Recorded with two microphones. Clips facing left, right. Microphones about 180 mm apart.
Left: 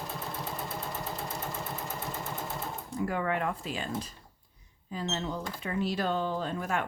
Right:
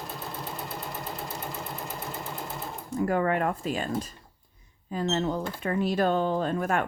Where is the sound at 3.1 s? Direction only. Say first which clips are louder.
Right 6 dB; 50° right (ahead or behind).